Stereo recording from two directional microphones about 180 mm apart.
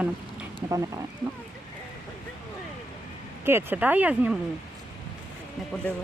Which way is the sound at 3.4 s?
15° right (ahead or behind).